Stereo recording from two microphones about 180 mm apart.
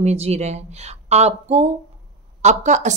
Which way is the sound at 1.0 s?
35° right (ahead or behind).